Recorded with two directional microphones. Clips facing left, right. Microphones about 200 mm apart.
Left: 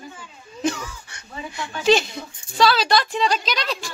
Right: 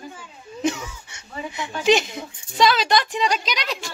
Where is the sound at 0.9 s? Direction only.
20° right (ahead or behind).